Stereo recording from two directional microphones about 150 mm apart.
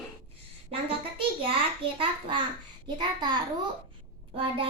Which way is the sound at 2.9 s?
30° right (ahead or behind).